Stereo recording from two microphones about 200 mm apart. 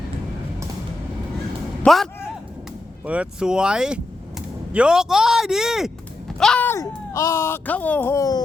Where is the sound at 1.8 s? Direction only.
Centre (ahead or behind).